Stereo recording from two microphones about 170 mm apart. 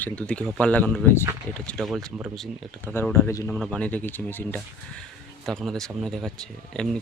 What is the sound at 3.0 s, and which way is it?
Speech, 10° left (ahead or behind).